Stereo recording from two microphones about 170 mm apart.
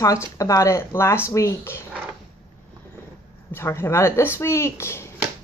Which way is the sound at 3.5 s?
15° left (ahead or behind).